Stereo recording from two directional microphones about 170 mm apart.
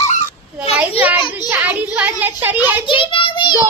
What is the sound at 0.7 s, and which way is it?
Speech, 10° right (ahead or behind).